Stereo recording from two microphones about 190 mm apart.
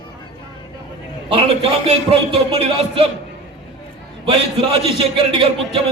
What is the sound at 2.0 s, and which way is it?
A man's voice, 30° right (ahead or behind).